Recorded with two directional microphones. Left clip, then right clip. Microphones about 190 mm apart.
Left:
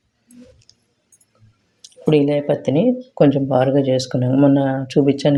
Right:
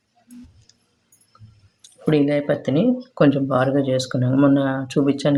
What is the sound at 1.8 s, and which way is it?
Speech, 15° left (ahead or behind).